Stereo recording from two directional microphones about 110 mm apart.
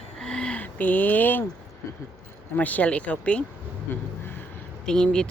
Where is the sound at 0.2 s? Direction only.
5° left (ahead or behind).